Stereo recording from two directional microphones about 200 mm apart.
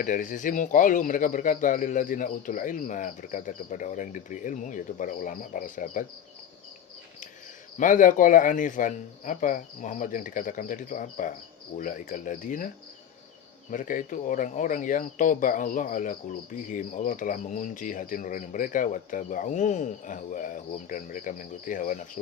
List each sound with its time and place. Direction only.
0.0 s speech: 40° left (ahead or behind)
7.8 s speech: 40° left (ahead or behind)